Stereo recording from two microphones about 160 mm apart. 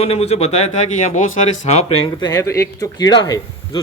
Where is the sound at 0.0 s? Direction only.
40° left (ahead or behind).